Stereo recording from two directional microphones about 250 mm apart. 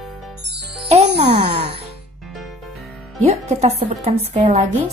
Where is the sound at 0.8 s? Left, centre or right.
Right.